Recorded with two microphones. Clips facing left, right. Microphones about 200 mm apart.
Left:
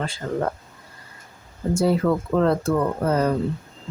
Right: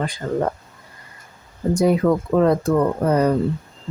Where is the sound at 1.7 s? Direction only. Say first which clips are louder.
Right 3 dB; 15° right (ahead or behind).